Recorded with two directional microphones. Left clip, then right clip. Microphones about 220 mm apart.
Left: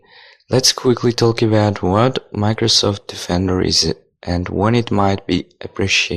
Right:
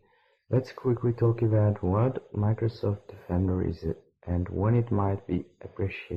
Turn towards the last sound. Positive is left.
turn(degrees=40)  # may be behind; listen again after turning